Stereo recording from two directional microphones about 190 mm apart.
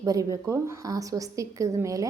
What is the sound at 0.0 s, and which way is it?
A woman's voice, 20° right (ahead or behind).